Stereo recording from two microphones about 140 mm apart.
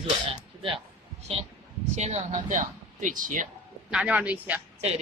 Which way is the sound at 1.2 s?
50° right (ahead or behind).